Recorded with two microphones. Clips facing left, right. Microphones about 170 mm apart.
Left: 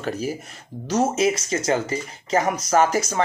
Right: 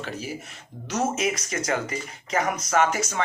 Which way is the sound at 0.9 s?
30° left (ahead or behind).